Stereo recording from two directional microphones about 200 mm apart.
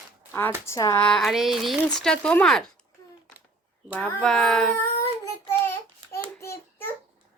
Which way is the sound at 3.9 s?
5° left (ahead or behind).